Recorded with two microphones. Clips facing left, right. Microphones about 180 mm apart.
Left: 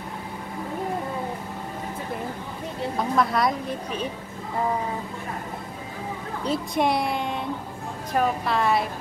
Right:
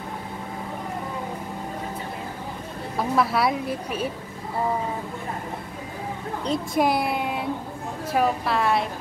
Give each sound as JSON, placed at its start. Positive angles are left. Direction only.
{"t": 3.0, "sound": "a woman's voice", "side_deg": -5}
{"t": 6.4, "sound": "a woman's voice", "side_deg": 0}